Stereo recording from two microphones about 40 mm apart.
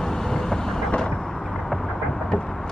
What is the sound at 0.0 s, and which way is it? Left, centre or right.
Vehicle, centre.